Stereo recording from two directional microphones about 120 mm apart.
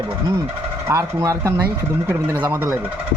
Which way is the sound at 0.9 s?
25° right (ahead or behind).